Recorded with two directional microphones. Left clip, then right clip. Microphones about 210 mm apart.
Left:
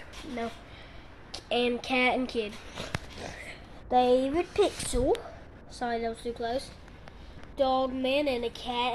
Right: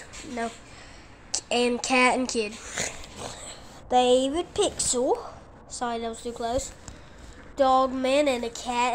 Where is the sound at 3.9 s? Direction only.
10° right (ahead or behind).